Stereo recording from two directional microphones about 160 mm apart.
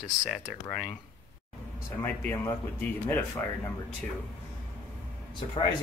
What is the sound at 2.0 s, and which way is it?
Speech, 15° left (ahead or behind).